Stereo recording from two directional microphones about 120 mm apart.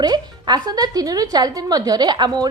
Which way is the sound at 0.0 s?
35° right (ahead or behind).